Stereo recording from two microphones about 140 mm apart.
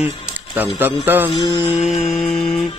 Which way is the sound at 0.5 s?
15° right (ahead or behind).